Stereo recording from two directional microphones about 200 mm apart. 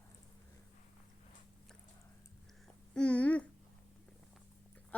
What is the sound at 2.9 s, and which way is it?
Babbling, 5° left (ahead or behind).